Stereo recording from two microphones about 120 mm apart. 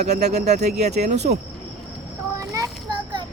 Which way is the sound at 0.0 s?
70° right (ahead or behind).